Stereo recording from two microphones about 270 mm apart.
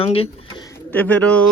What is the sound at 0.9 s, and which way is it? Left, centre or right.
Speech, centre.